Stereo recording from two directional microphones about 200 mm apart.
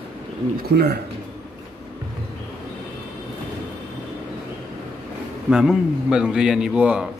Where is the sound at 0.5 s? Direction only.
50° right (ahead or behind).